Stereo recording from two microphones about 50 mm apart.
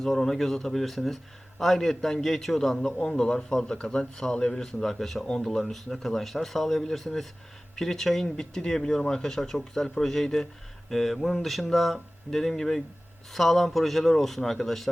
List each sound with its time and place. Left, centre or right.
0.0 s speech: centre